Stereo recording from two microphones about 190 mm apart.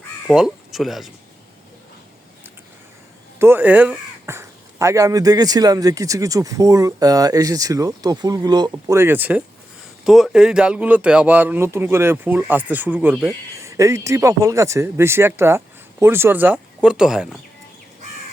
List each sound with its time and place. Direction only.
0.3 s speech: centre (ahead or behind)
3.3 s speech: 10° right (ahead or behind)